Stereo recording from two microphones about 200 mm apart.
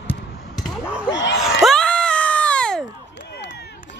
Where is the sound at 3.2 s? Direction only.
60° left (ahead or behind).